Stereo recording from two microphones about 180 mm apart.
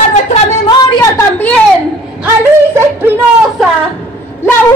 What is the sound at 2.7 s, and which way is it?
Speech, 10° right (ahead or behind).